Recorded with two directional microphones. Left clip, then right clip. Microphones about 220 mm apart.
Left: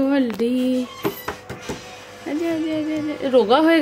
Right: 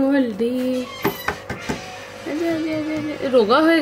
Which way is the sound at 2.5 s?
10° left (ahead or behind).